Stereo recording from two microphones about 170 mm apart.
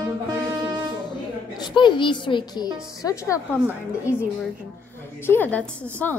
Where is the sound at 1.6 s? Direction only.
25° left (ahead or behind).